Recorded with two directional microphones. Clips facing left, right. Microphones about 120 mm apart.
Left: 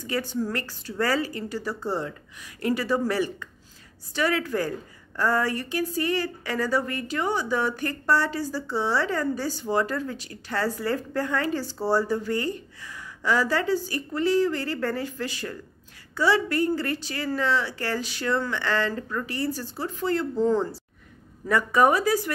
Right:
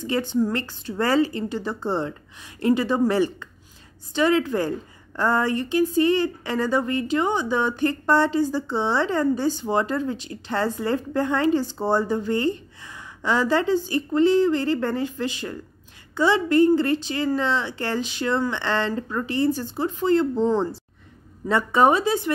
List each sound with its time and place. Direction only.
0.0 s a woman's voice: 25° right (ahead or behind)